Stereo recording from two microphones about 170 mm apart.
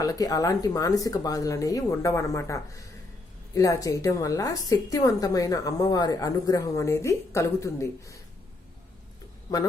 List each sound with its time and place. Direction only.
0.0 s a woman's voice: 20° left (ahead or behind)